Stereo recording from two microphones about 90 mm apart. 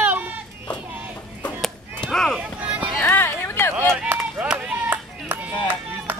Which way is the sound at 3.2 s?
25° left (ahead or behind).